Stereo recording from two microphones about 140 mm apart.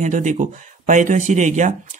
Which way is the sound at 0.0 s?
60° right (ahead or behind).